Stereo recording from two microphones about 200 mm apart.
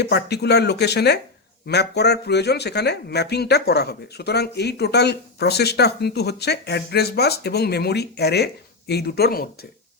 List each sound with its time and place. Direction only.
0.0 s speech: 55° left (ahead or behind)